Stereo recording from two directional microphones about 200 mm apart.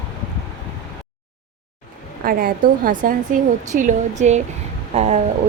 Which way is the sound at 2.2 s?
45° right (ahead or behind).